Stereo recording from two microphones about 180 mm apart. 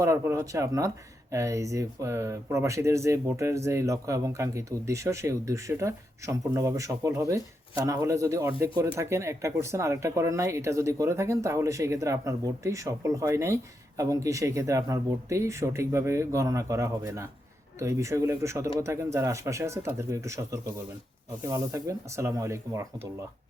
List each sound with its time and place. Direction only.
0.0 s speech: 15° right (ahead or behind)